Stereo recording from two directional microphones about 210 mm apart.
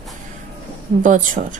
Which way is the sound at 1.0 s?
40° right (ahead or behind).